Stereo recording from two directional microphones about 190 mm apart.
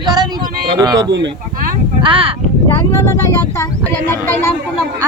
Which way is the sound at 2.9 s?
15° left (ahead or behind).